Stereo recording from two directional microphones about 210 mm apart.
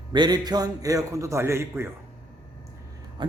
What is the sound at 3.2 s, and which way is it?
Speech, 20° right (ahead or behind).